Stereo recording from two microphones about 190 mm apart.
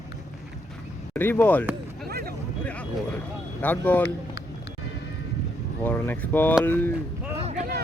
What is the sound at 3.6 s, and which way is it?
Speech, 10° left (ahead or behind).